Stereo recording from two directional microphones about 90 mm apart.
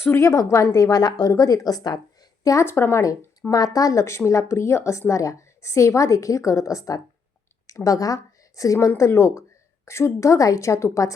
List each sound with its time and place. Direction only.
0.0 s a woman's voice: 30° left (ahead or behind); by 2.0 s 45° left (ahead or behind)
2.4 s a woman's voice: 35° left (ahead or behind)
3.5 s a woman's voice: 45° left (ahead or behind)